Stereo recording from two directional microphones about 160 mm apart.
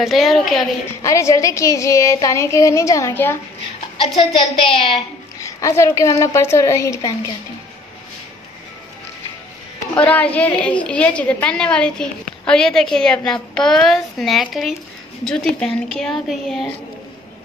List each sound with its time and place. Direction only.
0.0 s a woman's voice: centre (ahead or behind)
1.0 s child singing: 20° left (ahead or behind)
4.6 s a woman's voice: 35° left (ahead or behind)
5.4 s child singing: 20° left (ahead or behind)
9.9 s a woman's voice: 10° left (ahead or behind)